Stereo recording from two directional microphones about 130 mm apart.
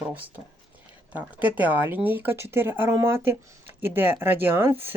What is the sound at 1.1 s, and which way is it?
Speech, 10° right (ahead or behind).